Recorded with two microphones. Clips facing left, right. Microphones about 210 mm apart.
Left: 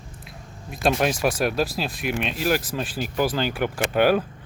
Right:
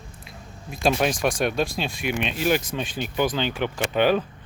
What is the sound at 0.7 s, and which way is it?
Speech, centre (ahead or behind).